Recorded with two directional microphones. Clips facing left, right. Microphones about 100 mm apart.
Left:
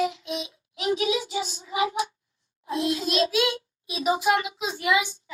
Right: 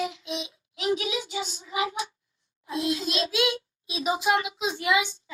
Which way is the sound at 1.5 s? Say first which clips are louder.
Left 3 dB; 30° left (ahead or behind).